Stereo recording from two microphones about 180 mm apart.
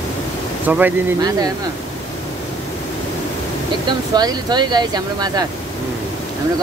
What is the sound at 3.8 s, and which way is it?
Speech, 25° right (ahead or behind).